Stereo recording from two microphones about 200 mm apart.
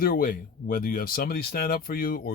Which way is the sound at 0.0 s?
45° left (ahead or behind).